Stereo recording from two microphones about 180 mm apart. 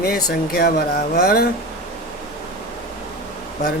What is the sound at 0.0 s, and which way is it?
Speech, 55° left (ahead or behind).